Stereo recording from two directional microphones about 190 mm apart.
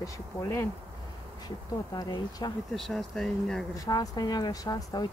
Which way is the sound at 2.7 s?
Centre (ahead or behind).